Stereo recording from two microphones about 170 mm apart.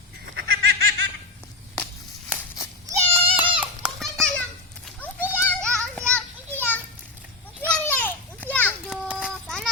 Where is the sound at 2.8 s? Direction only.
15° right (ahead or behind).